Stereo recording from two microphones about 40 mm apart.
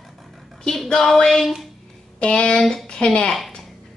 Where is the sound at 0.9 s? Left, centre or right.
Centre.